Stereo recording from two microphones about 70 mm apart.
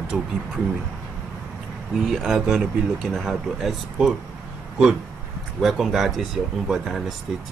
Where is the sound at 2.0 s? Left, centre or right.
Centre.